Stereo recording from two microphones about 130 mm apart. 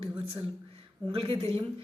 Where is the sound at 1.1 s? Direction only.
45° right (ahead or behind).